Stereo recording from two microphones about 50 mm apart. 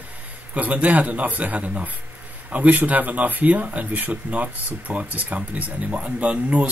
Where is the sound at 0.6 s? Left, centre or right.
Right.